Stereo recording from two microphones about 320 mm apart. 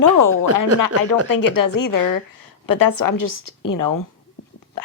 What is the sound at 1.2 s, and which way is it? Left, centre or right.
A woman's voice, left.